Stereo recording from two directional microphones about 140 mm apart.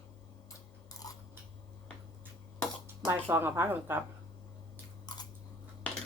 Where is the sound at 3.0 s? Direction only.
15° right (ahead or behind).